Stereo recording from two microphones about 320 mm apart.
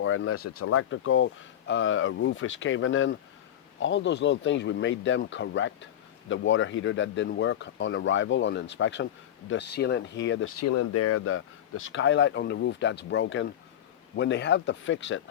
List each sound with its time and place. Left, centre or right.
0.0 s speech: left